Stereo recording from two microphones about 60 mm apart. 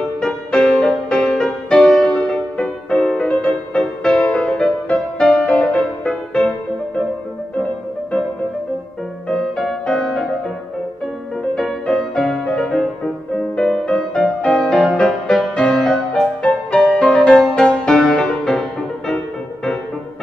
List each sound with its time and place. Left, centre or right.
0.2 s music: centre
9.4 s music: centre
11.8 s music: centre
16.4 s music: left